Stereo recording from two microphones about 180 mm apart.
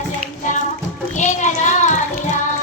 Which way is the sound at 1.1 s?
40° left (ahead or behind).